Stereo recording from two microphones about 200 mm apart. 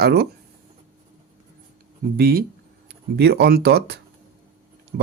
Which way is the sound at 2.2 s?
50° right (ahead or behind).